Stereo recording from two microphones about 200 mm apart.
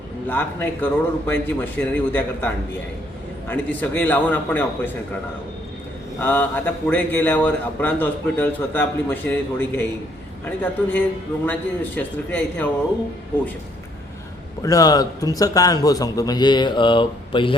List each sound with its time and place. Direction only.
0.3 s a man's voice: 10° left (ahead or behind)
3.5 s a man's voice: 10° left (ahead or behind)
6.1 s a man's voice: 10° left (ahead or behind)
14.6 s a man's voice: 15° left (ahead or behind)